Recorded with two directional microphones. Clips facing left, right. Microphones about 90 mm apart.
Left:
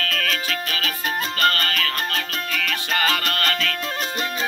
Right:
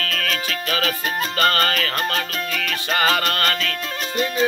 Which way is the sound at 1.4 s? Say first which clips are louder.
Right 3 dB; 30° right (ahead or behind).